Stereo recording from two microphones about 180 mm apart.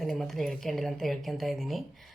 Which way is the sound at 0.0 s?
Centre (ahead or behind).